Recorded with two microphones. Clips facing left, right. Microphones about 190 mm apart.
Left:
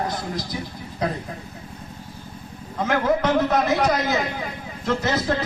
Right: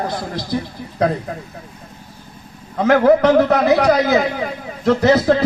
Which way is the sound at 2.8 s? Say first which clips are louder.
Right 9 dB; 65° right (ahead or behind).